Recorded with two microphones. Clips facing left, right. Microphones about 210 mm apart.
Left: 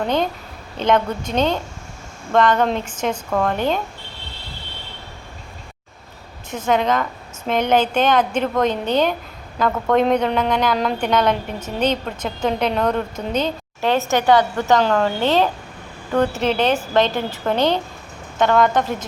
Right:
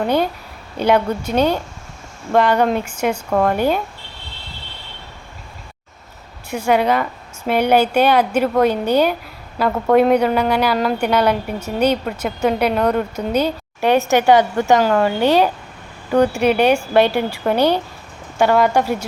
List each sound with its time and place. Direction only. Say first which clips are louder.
0.0 s a woman's voice: right 3 dB; 10° right (ahead or behind)
6.5 s a woman's voice: right 3 dB; 10° right (ahead or behind)